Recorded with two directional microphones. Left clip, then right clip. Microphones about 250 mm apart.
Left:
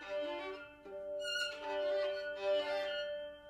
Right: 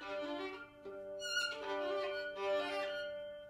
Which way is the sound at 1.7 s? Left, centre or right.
Right.